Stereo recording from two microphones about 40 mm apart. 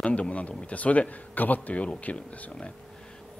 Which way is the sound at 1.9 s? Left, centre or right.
Left.